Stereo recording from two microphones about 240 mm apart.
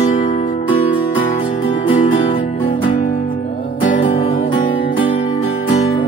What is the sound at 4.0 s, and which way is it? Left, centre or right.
Music, left.